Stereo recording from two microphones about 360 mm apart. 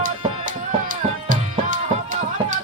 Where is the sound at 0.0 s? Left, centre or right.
Right.